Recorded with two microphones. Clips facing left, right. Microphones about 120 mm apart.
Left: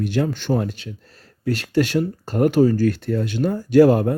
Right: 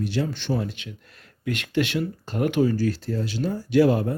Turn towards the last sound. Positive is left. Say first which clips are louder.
# left 6 dB
turn(degrees=45)  # may be behind; listen again after turning